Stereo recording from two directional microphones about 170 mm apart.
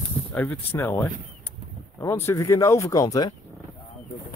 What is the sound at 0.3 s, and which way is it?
Speech, 10° left (ahead or behind).